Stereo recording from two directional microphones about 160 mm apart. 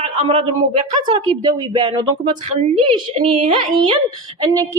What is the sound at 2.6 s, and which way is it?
A woman's voice, 40° right (ahead or behind).